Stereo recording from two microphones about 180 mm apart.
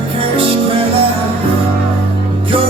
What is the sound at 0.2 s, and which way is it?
Music, 30° right (ahead or behind).